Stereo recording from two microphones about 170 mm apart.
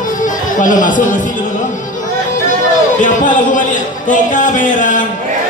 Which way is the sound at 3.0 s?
50° left (ahead or behind).